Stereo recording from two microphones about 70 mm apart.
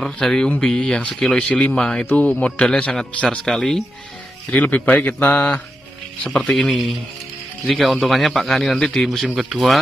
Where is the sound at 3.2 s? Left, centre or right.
Centre.